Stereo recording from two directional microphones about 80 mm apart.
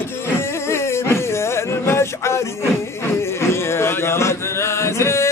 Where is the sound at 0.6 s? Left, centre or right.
Left.